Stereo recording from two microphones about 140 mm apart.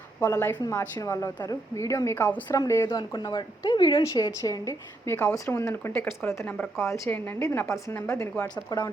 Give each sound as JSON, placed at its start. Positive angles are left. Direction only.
{"t": 0.3, "sound": "a woman's voice", "side_deg": 20}
{"t": 2.9, "sound": "a woman's voice", "side_deg": 35}